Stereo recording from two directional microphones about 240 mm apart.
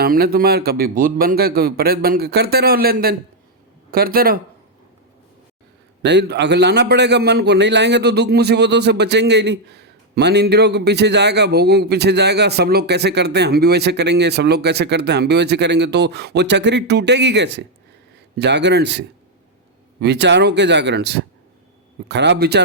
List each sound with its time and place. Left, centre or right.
0.0 s a man's voice: right
6.0 s a man's voice: right